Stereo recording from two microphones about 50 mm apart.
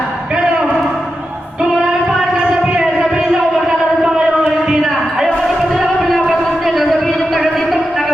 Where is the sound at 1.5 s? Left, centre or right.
Centre.